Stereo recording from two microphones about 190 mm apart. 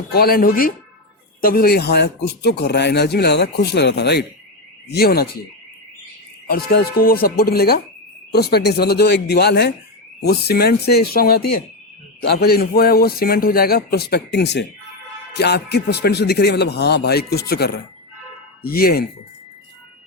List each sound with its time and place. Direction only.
0.1 s a man's voice: 55° left (ahead or behind)
6.5 s a man's voice: 55° left (ahead or behind)